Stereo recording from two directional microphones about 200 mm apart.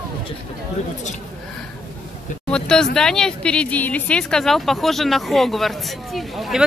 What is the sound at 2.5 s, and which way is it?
Speech, 5° left (ahead or behind).